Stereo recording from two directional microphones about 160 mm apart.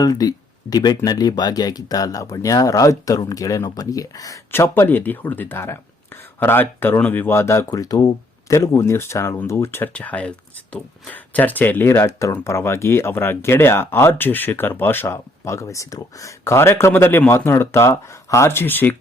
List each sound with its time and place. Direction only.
0.0 s speech: 25° left (ahead or behind)